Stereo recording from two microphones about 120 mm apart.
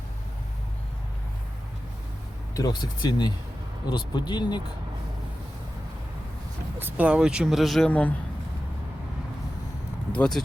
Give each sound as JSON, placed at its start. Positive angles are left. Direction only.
{"t": 2.6, "sound": "speech", "side_deg": 35}
{"t": 6.7, "sound": "speech", "side_deg": -15}
{"t": 7.9, "sound": "speech", "side_deg": 15}
{"t": 10.1, "sound": "speech", "side_deg": 5}